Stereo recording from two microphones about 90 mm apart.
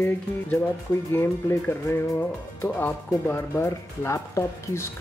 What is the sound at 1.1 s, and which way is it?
Speech, 25° left (ahead or behind).